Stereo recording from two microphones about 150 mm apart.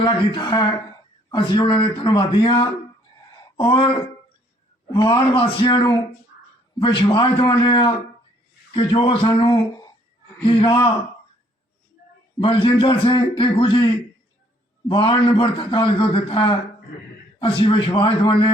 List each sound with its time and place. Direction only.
0.0 s a man's voice: 30° left (ahead or behind)
4.9 s a man's voice: 30° left (ahead or behind)
12.4 s a man's voice: 35° left (ahead or behind)